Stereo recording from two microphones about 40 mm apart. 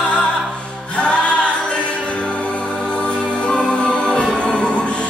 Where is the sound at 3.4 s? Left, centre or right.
Left.